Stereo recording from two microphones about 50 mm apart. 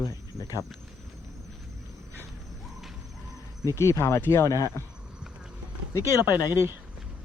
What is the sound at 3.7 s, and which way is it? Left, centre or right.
Speech, left.